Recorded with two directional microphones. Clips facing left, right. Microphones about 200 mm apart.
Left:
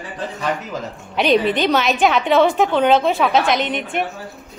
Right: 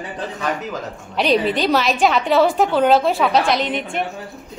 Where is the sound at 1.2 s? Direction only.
Centre (ahead or behind).